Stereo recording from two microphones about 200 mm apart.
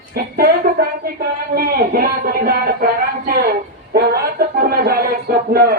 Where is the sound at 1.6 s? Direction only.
50° right (ahead or behind).